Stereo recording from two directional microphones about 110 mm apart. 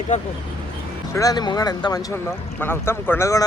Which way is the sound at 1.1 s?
30° left (ahead or behind).